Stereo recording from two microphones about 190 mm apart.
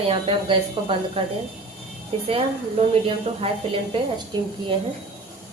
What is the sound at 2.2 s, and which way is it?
Speech, 30° right (ahead or behind).